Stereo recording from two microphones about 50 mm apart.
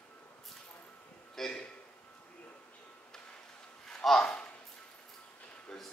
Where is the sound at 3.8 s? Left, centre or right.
Centre.